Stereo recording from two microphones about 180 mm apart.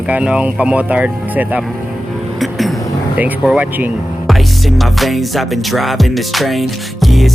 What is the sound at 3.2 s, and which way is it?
Speech, 10° right (ahead or behind).